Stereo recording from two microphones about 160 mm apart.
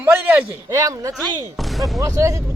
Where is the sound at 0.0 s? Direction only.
15° right (ahead or behind).